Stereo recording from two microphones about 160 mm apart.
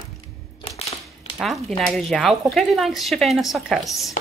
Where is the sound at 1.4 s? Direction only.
Centre (ahead or behind).